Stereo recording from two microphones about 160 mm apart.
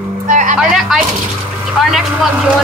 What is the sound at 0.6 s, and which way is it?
A woman's voice, 5° right (ahead or behind).